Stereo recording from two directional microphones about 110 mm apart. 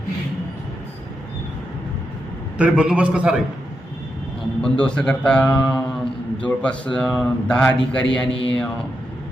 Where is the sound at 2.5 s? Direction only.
10° right (ahead or behind).